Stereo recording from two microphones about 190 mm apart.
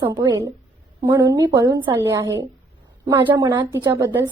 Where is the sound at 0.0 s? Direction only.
20° right (ahead or behind).